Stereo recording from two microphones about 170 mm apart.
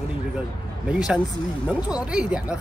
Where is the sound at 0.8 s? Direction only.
5° right (ahead or behind).